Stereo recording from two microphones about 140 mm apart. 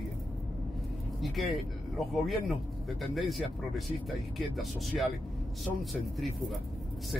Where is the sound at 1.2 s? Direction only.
Centre (ahead or behind).